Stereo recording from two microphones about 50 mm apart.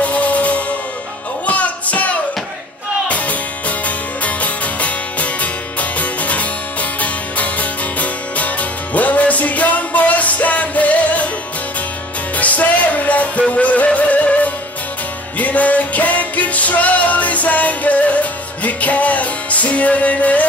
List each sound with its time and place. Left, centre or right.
0.0 s music: left
12.4 s music: left